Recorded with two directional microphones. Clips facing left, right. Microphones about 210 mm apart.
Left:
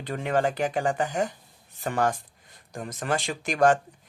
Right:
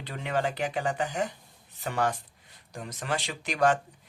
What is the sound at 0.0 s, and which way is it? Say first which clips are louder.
Speech: left 5 dB; 45° left (ahead or behind).